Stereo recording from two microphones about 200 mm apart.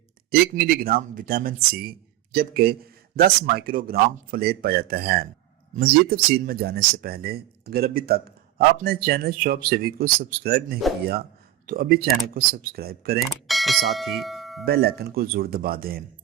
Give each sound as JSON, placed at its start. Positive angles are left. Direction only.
{"t": 0.3, "sound": "speech", "side_deg": -50}
{"t": 13.1, "sound": "speech", "side_deg": 0}
{"t": 14.6, "sound": "speech", "side_deg": -50}